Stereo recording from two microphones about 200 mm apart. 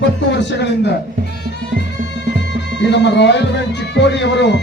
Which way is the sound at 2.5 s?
60° left (ahead or behind).